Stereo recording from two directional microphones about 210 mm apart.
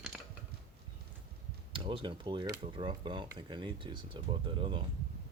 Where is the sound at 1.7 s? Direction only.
25° right (ahead or behind).